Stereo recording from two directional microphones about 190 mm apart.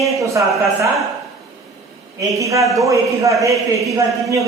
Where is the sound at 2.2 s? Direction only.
15° right (ahead or behind).